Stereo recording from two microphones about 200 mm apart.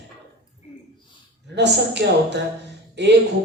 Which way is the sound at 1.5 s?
60° right (ahead or behind).